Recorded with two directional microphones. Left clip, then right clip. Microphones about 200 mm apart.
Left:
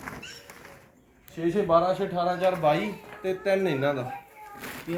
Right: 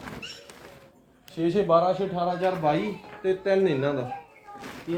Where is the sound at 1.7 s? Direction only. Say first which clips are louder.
Right 1 dB; 10° left (ahead or behind).